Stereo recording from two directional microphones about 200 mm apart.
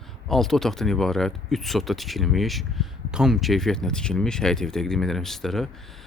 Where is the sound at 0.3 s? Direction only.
Centre (ahead or behind).